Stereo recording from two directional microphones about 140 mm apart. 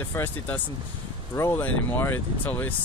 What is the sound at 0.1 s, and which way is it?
Speech, 15° left (ahead or behind).